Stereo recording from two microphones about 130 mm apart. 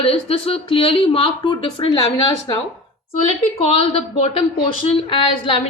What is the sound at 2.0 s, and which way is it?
Speech, 30° left (ahead or behind).